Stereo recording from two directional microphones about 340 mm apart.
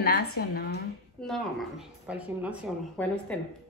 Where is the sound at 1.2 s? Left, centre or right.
Centre.